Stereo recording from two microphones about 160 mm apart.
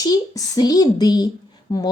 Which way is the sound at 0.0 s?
25° left (ahead or behind).